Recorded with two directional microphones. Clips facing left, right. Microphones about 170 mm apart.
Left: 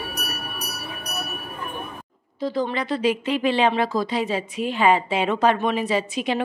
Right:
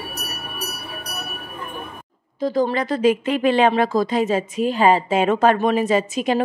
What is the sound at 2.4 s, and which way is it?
Speech, 45° right (ahead or behind).